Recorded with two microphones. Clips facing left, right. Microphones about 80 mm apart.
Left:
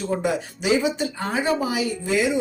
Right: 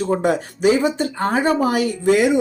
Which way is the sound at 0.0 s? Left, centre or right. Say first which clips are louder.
Right 5 dB; right.